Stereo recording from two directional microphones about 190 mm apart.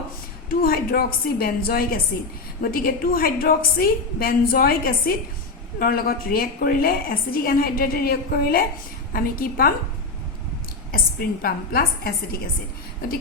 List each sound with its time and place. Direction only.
0.6 s a woman's voice: 50° left (ahead or behind)
11.4 s a woman's voice: 50° left (ahead or behind)